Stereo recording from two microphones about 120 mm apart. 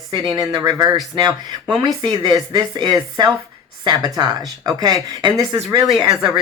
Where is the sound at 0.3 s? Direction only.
35° right (ahead or behind).